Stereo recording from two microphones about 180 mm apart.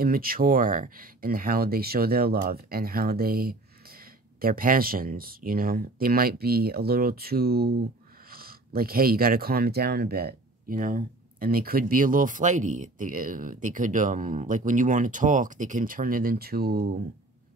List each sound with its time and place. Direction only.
0.0 s speech: 55° right (ahead or behind)